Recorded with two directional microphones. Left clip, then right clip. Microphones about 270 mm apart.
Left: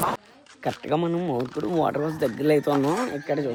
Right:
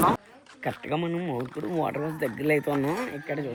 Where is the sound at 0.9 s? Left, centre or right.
Centre.